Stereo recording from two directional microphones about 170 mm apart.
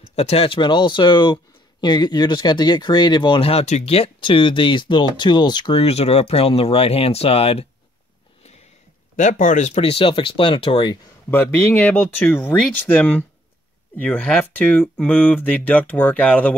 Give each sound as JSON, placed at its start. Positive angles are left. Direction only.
{"t": 0.1, "sound": "speech", "side_deg": 35}
{"t": 9.1, "sound": "speech", "side_deg": 45}
{"t": 11.2, "sound": "speech", "side_deg": 15}
{"t": 13.9, "sound": "speech", "side_deg": 10}